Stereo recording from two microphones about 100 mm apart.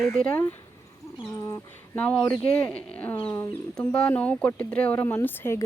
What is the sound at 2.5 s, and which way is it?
Speech, 15° left (ahead or behind).